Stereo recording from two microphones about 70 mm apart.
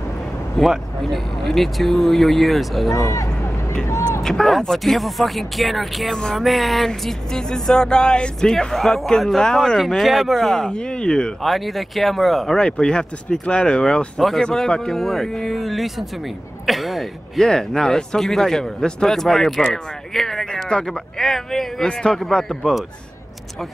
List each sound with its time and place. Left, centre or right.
0.6 s speech: centre
2.9 s speech: left
4.2 s speech: centre